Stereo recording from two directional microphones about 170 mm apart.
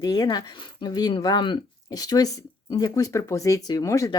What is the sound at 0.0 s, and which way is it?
Speech, 25° left (ahead or behind).